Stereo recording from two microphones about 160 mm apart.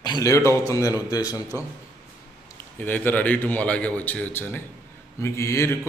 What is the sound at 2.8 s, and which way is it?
A man's voice, 10° left (ahead or behind).